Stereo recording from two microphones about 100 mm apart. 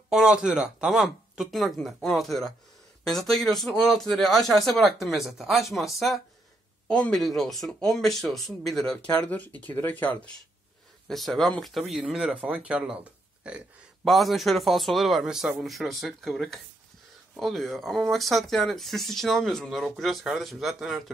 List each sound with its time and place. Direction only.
0.1 s speech: 5° right (ahead or behind)
8.9 s speech: 15° left (ahead or behind)
11.1 s speech: centre (ahead or behind)
14.0 s speech: centre (ahead or behind)